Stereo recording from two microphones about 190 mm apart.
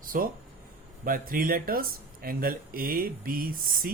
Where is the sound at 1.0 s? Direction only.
50° right (ahead or behind).